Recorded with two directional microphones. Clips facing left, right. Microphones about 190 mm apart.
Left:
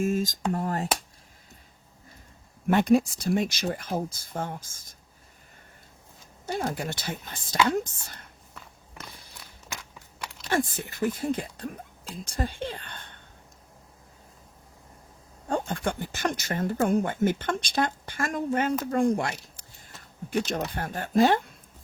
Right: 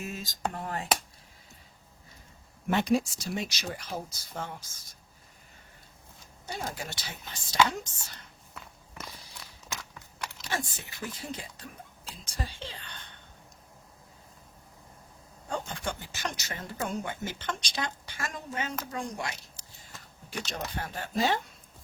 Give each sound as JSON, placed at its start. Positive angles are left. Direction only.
{"t": 0.0, "sound": "speech", "side_deg": 45}
{"t": 2.6, "sound": "speech", "side_deg": 55}
{"t": 6.4, "sound": "speech", "side_deg": 55}
{"t": 9.0, "sound": "a sound", "side_deg": 55}
{"t": 10.5, "sound": "speech", "side_deg": 55}
{"t": 15.4, "sound": "speech", "side_deg": 50}